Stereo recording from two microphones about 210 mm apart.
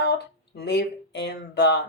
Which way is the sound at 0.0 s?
50° left (ahead or behind).